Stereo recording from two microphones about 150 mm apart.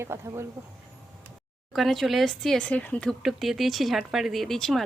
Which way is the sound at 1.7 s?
Centre (ahead or behind).